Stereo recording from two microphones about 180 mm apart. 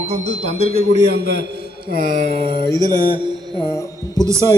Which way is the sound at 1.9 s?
50° right (ahead or behind).